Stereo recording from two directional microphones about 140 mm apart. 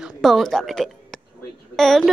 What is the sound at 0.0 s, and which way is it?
A woman's voice, centre (ahead or behind).